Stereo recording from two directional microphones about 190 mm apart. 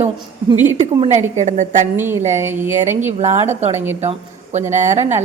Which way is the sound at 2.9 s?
35° right (ahead or behind).